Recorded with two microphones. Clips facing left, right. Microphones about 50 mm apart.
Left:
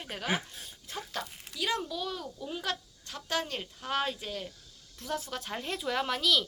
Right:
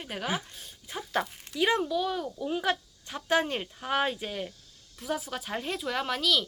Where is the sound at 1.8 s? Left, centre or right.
Centre.